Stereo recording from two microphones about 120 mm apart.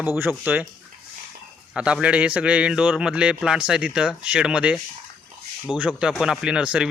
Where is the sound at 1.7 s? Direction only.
10° right (ahead or behind).